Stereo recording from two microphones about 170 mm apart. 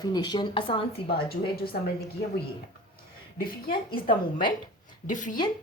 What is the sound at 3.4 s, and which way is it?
Speech, 60° left (ahead or behind).